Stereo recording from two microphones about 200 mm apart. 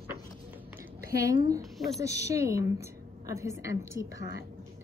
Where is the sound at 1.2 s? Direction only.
15° right (ahead or behind).